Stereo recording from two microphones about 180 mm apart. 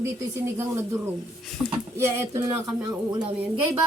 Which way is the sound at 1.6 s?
15° right (ahead or behind).